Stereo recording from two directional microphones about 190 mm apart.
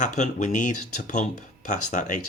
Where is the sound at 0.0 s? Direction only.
40° left (ahead or behind).